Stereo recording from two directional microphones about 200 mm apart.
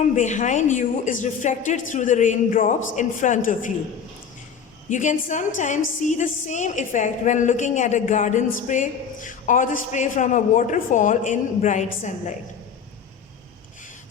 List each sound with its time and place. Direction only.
0.2 s a woman's voice: 35° left (ahead or behind)
4.9 s a woman's voice: 40° left (ahead or behind)